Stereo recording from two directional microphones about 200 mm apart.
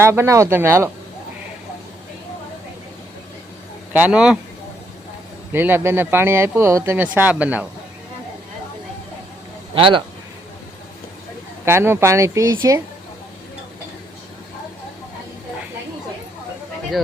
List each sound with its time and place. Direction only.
0.0 s speech: 10° right (ahead or behind)
3.9 s speech: 5° right (ahead or behind)
5.5 s speech: 10° right (ahead or behind)
9.7 s a man's voice: 25° right (ahead or behind)
11.6 s speech: 10° right (ahead or behind)